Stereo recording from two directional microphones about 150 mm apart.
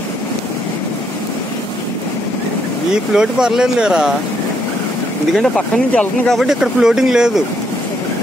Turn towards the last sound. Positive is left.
turn(degrees=-5)  # may be behind; listen again after turning